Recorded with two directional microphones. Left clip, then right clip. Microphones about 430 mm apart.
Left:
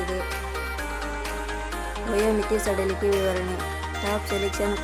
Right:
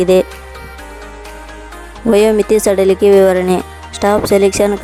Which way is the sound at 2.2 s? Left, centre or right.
Right.